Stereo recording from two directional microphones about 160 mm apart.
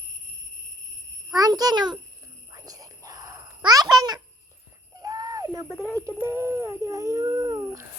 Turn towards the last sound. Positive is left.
turn(degrees=-20)  # may be behind; listen again after turning